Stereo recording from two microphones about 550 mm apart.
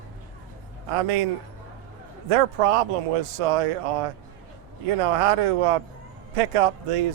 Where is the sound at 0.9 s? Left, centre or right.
Right.